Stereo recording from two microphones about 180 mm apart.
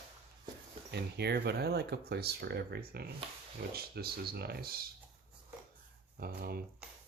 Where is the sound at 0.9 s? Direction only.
65° right (ahead or behind).